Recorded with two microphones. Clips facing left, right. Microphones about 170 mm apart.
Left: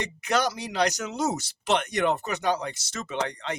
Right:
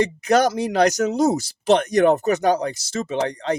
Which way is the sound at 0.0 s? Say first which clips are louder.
Right 9 dB; 40° right (ahead or behind).